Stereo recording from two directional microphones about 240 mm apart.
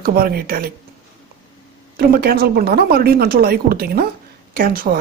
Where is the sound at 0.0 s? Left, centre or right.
Right.